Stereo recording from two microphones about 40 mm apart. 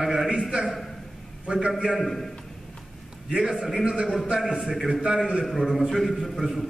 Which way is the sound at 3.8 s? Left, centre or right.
Right.